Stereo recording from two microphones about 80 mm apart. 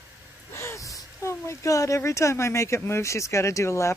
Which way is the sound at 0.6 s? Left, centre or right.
Left.